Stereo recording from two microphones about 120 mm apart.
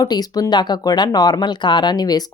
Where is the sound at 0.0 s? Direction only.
30° left (ahead or behind).